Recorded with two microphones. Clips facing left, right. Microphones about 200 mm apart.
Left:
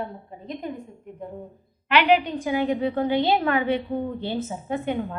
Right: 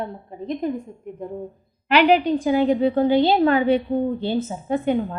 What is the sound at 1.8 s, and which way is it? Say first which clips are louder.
A woman's voice: right 3 dB; 35° right (ahead or behind).